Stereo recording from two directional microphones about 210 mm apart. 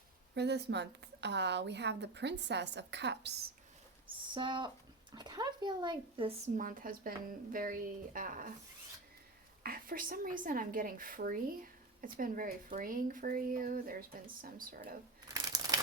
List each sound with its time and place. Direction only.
0.3 s a woman's voice: 55° right (ahead or behind)
4.4 s a woman's voice: 20° right (ahead or behind); by 8.5 s 40° right (ahead or behind)
9.6 s a woman's voice: 45° right (ahead or behind)
15.3 s a sound: 15° right (ahead or behind)